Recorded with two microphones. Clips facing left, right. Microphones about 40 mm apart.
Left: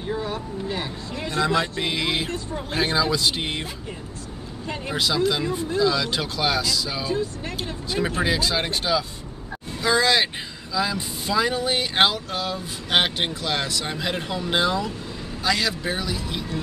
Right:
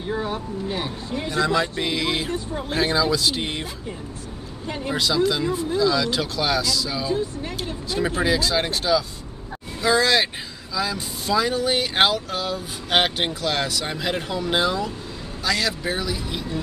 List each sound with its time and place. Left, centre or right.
0.3 s speech: centre
1.4 s speech: centre
4.9 s speech: centre